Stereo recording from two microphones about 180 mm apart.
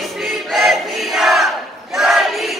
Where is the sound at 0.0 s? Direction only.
Centre (ahead or behind).